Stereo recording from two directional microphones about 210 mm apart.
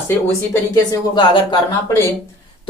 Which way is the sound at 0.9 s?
20° left (ahead or behind).